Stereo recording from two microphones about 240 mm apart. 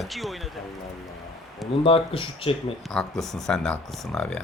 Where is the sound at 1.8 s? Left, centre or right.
Left.